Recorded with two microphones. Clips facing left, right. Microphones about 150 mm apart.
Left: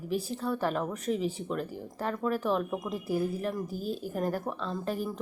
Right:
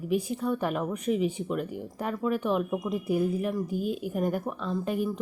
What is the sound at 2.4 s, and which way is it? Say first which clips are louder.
Speech: right 2 dB; 5° right (ahead or behind).